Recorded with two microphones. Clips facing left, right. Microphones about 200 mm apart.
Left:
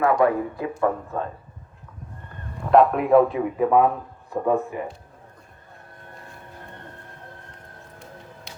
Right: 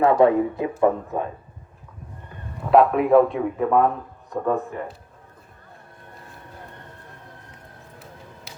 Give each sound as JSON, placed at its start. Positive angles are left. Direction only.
{"t": 0.0, "sound": "speech", "side_deg": -25}
{"t": 2.3, "sound": "a man's voice", "side_deg": 0}
{"t": 8.5, "sound": "music", "side_deg": -5}